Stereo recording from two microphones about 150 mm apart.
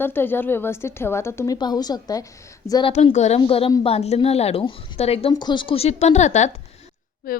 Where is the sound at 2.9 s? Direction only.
45° left (ahead or behind).